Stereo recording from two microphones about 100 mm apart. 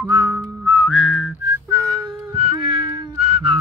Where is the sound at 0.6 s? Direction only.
15° right (ahead or behind).